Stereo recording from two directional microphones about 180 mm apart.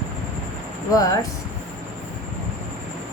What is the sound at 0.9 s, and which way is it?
Speech, 20° left (ahead or behind).